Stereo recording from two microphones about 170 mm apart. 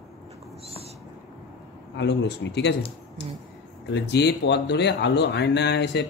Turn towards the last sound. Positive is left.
turn(degrees=90)